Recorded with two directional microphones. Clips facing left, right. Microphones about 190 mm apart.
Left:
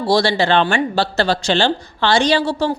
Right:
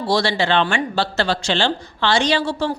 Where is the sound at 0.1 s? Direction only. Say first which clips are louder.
Left 3 dB; 35° left (ahead or behind).